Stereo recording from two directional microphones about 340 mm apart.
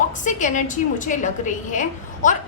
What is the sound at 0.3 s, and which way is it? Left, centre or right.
A woman's voice, left.